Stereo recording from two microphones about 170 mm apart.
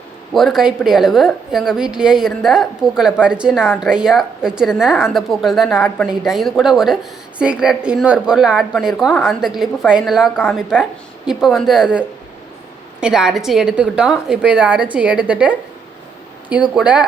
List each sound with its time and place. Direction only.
0.3 s a woman's voice: centre (ahead or behind)
16.7 s a woman's voice: 5° right (ahead or behind)